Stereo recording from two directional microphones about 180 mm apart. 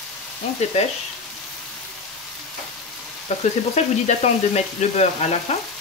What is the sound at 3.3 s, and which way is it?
Frying, 40° left (ahead or behind).